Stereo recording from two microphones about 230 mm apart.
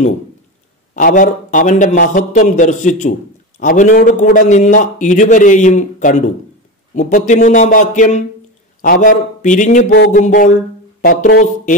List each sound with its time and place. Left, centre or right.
0.9 s a man's voice: left